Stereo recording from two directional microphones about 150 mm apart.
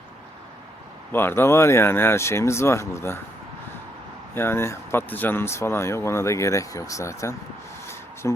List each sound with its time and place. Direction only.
1.1 s speech: 15° left (ahead or behind)
4.4 s speech: 15° left (ahead or behind)